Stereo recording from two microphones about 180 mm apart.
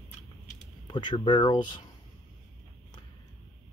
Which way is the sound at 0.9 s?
25° left (ahead or behind).